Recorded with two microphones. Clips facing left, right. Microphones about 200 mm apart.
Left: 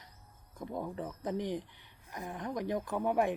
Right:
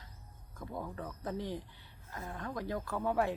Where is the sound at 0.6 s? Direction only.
20° left (ahead or behind).